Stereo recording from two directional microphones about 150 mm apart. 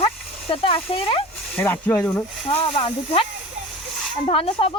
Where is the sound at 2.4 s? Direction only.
35° left (ahead or behind).